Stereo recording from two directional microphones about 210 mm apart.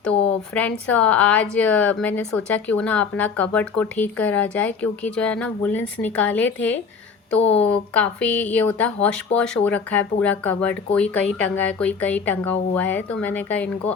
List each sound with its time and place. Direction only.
0.5 s a woman's voice: 5° left (ahead or behind)
7.3 s a woman's voice: 30° left (ahead or behind)
7.7 s a woman's voice: 5° left (ahead or behind)